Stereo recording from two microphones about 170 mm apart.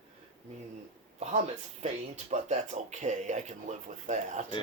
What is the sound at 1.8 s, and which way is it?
Speech, 40° right (ahead or behind).